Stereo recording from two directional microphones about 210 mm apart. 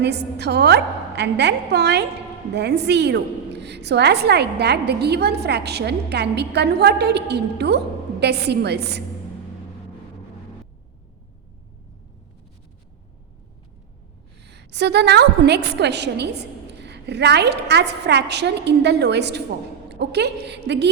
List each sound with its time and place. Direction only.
0.0 s a woman's voice: 55° right (ahead or behind)
14.4 s a woman's voice: 55° right (ahead or behind)